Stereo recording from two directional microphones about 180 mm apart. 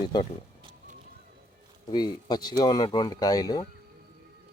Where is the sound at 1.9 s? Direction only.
25° left (ahead or behind).